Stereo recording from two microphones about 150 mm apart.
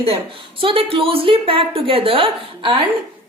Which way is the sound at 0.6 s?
40° right (ahead or behind).